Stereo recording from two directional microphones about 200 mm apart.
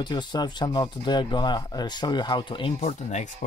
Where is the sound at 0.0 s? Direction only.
20° left (ahead or behind).